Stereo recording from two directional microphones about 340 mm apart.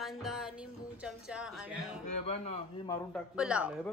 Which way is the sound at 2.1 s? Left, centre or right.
Centre.